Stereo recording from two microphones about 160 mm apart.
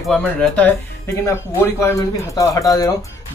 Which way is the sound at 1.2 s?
15° left (ahead or behind).